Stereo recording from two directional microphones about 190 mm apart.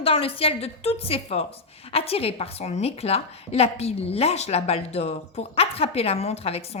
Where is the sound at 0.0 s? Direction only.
30° left (ahead or behind).